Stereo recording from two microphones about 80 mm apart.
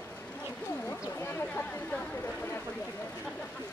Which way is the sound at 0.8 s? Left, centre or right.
Left.